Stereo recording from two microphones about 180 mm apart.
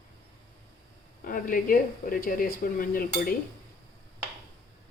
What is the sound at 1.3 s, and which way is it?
A woman's voice, 50° left (ahead or behind).